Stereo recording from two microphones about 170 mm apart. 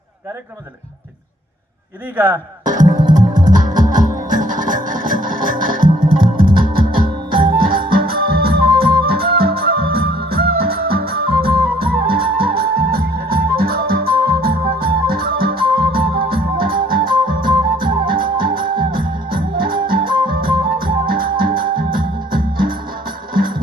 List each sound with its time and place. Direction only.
2.1 s speech: 10° right (ahead or behind)
2.6 s music: 50° right (ahead or behind)
17.2 s music: 25° right (ahead or behind)
17.8 s music: 60° right (ahead or behind)